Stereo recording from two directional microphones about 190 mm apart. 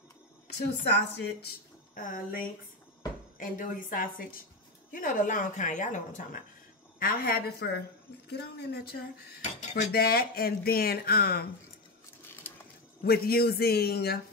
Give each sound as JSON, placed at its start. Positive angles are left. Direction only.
{"t": 0.8, "sound": "a man's voice", "side_deg": 60}
{"t": 2.0, "sound": "speech", "side_deg": 45}
{"t": 3.3, "sound": "a man's voice", "side_deg": 45}
{"t": 9.4, "sound": "dishes", "side_deg": 35}
{"t": 9.9, "sound": "speech", "side_deg": 55}
{"t": 13.0, "sound": "a man's voice", "side_deg": 55}